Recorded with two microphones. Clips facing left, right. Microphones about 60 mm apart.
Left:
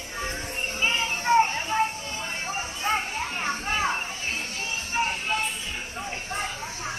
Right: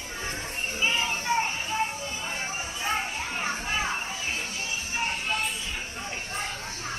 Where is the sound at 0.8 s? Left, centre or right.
Left.